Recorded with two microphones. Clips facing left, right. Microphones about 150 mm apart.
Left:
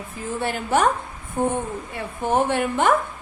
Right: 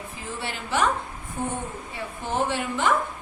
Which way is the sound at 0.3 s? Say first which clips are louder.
Left 5 dB; 50° left (ahead or behind).